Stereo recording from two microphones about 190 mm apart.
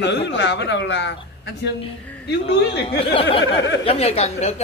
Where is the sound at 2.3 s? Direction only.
60° left (ahead or behind).